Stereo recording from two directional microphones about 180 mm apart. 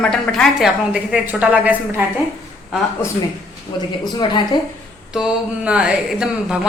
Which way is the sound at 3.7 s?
25° left (ahead or behind).